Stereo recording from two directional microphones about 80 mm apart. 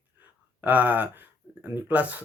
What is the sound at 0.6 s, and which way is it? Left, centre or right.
Speech, right.